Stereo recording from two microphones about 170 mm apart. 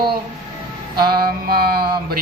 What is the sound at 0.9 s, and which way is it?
Mantra, 65° right (ahead or behind).